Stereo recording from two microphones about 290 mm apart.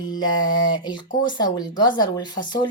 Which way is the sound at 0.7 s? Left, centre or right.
Centre.